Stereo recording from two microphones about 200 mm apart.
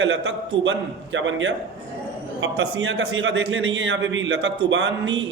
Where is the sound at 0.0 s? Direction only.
70° right (ahead or behind).